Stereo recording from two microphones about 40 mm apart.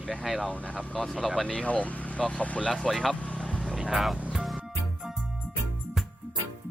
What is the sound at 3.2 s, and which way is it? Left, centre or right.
Vehicle, left.